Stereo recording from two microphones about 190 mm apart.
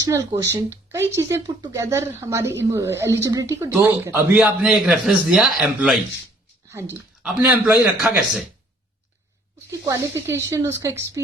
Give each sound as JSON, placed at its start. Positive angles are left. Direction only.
{"t": 0.1, "sound": "speech", "side_deg": -20}
{"t": 7.2, "sound": "speech", "side_deg": -10}
{"t": 9.8, "sound": "speech", "side_deg": -15}